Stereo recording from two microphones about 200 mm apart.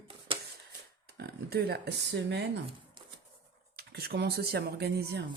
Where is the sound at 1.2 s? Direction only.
50° right (ahead or behind).